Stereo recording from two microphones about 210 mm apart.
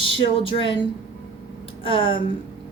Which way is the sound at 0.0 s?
25° left (ahead or behind).